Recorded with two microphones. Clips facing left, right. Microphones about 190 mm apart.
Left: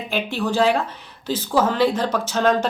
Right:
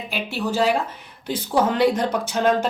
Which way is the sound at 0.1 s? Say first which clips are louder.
Left 3 dB; 5° right (ahead or behind).